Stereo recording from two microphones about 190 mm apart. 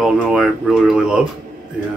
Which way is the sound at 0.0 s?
5° right (ahead or behind).